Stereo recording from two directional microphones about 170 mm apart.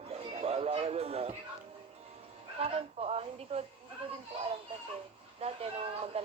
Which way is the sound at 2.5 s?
35° right (ahead or behind).